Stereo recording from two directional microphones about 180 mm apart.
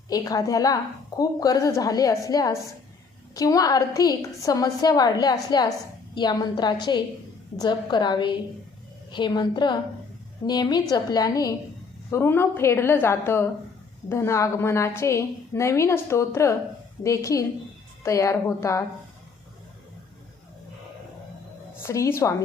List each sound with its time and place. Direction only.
0.1 s a woman's voice: 20° left (ahead or behind)
21.8 s a woman's voice: 15° left (ahead or behind)